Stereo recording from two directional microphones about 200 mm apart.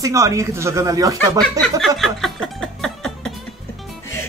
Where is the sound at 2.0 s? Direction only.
Centre (ahead or behind).